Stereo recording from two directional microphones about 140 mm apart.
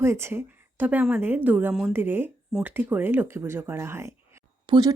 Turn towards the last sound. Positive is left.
turn(degrees=-30)  # may be behind; listen again after turning